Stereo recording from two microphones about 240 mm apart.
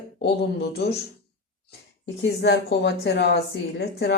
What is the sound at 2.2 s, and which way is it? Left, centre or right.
A woman's voice, left.